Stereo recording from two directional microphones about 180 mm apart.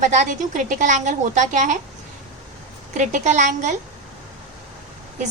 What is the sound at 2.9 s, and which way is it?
Speech, 45° right (ahead or behind).